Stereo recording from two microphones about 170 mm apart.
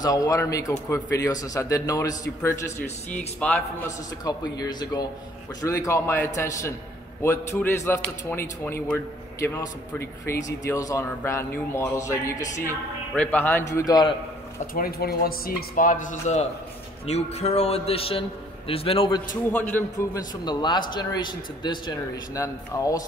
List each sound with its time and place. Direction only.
0.0 s a man's voice: 20° left (ahead or behind)
4.2 s a man's voice: 20° left (ahead or behind)
14.7 s a man's voice: 60° left (ahead or behind); by 19.2 s 30° left (ahead or behind)
20.4 s speech: 25° left (ahead or behind)